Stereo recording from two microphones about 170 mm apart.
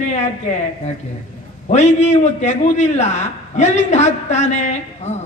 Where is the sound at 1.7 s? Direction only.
40° left (ahead or behind).